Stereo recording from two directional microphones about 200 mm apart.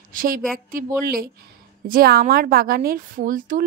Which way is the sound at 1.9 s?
45° right (ahead or behind).